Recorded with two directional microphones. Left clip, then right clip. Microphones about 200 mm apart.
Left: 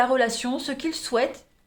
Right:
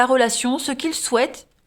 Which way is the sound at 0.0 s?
50° right (ahead or behind).